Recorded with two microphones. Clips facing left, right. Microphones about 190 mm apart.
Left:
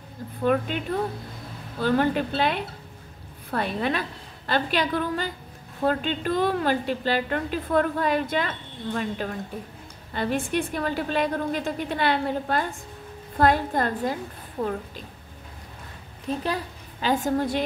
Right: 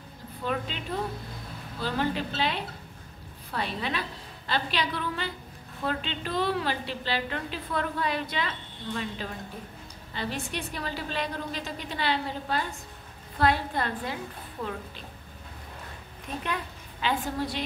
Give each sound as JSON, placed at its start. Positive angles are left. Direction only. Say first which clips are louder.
{"t": 0.4, "sound": "a woman's voice", "louder": "left 8 dB", "side_deg": 55}
{"t": 16.4, "sound": "a woman's voice", "louder": "left 5 dB", "side_deg": 40}